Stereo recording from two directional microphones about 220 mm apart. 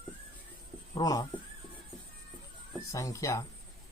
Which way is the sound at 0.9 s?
15° left (ahead or behind).